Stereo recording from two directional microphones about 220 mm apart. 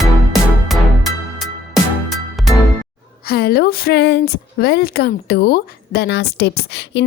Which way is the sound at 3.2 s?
45° left (ahead or behind).